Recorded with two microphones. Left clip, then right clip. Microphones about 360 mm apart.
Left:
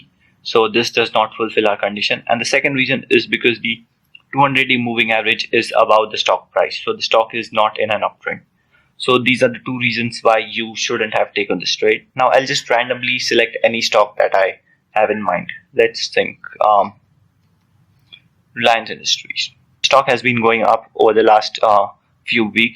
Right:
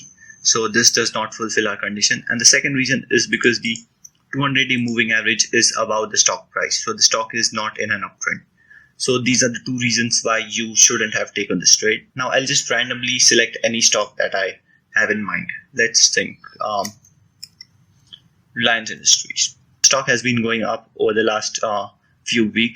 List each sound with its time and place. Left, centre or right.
0.4 s speech: centre
18.5 s speech: centre